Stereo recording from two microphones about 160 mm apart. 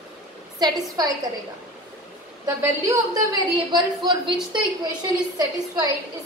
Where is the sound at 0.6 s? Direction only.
25° right (ahead or behind).